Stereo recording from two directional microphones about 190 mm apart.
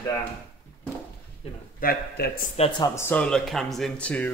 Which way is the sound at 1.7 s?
55° left (ahead or behind).